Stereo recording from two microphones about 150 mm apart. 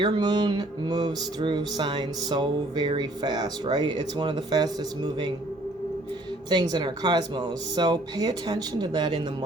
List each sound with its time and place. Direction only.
0.0 s music: 30° right (ahead or behind)
6.5 s music: 30° right (ahead or behind)